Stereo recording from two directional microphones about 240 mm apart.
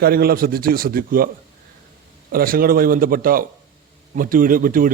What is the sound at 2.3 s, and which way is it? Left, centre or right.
A man's voice, right.